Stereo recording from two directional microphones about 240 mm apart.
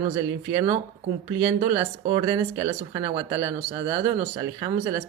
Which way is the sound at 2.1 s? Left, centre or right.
Centre.